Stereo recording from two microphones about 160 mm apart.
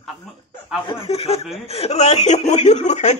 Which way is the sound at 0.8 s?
35° left (ahead or behind).